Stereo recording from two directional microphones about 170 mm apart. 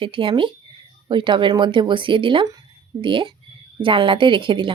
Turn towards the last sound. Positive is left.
turn(degrees=-30)  # may be behind; listen again after turning